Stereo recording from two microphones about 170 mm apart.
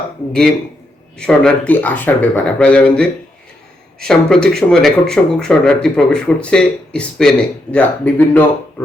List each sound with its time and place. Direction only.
1.2 s a man's voice: 5° left (ahead or behind)